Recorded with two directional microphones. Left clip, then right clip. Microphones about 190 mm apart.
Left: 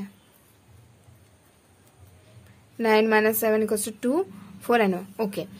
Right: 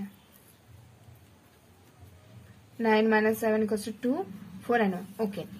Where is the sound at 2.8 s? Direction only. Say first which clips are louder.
Left 4 dB; 50° left (ahead or behind).